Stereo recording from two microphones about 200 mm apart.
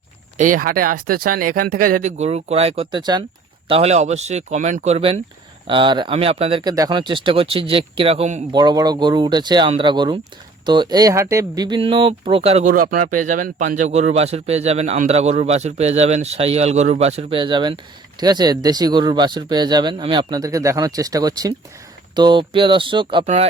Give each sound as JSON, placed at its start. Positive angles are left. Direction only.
{"t": 0.3, "sound": "speech", "side_deg": -40}
{"t": 3.7, "sound": "speech", "side_deg": -30}
{"t": 12.6, "sound": "speech", "side_deg": -45}